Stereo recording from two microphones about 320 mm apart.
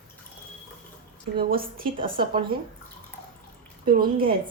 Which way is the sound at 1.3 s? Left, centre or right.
Right.